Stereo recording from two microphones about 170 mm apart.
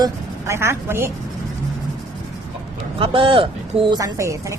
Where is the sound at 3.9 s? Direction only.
20° right (ahead or behind).